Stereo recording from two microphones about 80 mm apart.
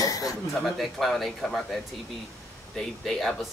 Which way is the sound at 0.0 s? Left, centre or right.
Left.